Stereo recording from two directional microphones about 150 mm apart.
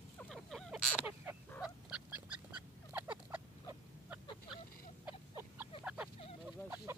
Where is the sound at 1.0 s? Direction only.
10° right (ahead or behind).